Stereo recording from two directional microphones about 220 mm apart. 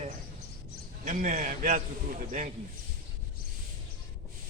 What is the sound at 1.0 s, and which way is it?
Speech, 35° right (ahead or behind).